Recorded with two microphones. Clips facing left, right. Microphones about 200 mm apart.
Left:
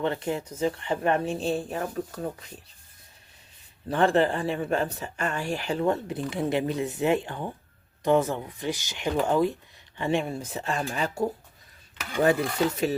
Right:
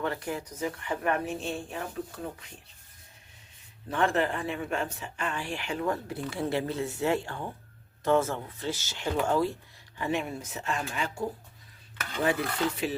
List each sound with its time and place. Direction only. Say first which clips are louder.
0.0 s speech: left 4 dB; 25° left (ahead or behind); by 2.2 s 40° left (ahead or behind)
3.8 s speech: left 5 dB; 35° left (ahead or behind); by 9.6 s 15° left (ahead or behind)
10.0 s speech: left 4 dB; 30° left (ahead or behind)
12.2 s speech: left 5 dB; 45° left (ahead or behind)